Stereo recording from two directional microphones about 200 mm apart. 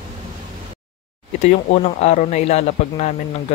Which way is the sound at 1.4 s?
30° left (ahead or behind).